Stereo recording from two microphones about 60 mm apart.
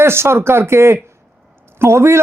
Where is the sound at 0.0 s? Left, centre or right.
Right.